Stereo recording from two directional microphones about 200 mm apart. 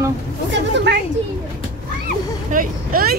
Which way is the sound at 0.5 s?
60° right (ahead or behind).